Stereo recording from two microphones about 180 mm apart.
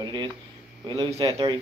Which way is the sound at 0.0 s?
25° right (ahead or behind).